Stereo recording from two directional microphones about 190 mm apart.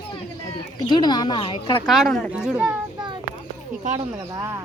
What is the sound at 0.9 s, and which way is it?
Speech, 20° left (ahead or behind).